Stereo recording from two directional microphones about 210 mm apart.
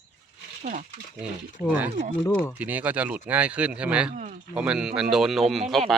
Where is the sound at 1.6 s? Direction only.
10° right (ahead or behind).